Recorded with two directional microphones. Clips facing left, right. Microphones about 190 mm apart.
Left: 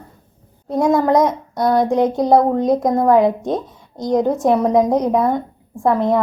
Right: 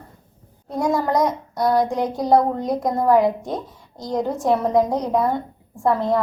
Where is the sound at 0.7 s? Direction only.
20° left (ahead or behind).